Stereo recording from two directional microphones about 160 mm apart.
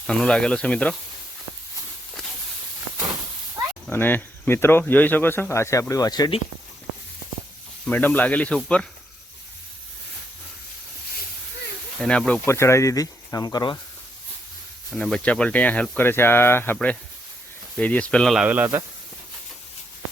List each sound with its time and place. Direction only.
0.1 s speech: 5° left (ahead or behind)
3.8 s speech: 10° left (ahead or behind)
7.9 s speech: 10° left (ahead or behind)
11.9 s speech: 5° left (ahead or behind); by 13.7 s 25° left (ahead or behind)
14.8 s speech: centre (ahead or behind)
18.4 s speech: 10° right (ahead or behind)